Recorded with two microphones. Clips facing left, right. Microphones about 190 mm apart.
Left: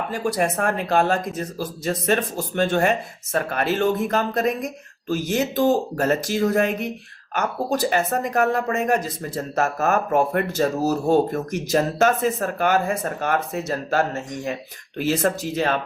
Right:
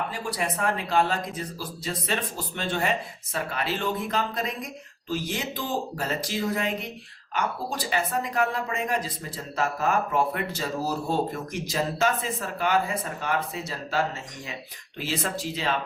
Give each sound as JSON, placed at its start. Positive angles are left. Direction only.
{"t": 0.1, "sound": "speech", "side_deg": 45}